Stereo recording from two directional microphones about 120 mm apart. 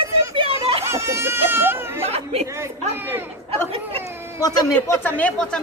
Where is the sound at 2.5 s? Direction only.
20° right (ahead or behind).